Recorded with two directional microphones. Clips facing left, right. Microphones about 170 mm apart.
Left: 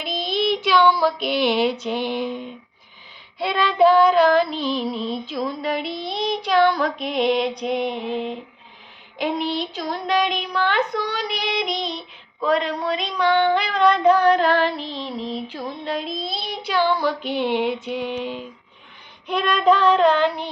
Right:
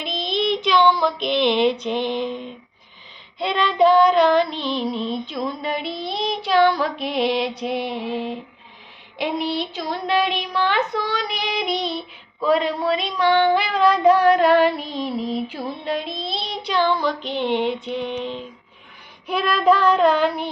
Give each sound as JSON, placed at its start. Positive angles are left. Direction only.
{"t": 0.0, "sound": "child singing", "side_deg": 5}
{"t": 9.4, "sound": "child singing", "side_deg": 0}
{"t": 19.3, "sound": "child singing", "side_deg": -5}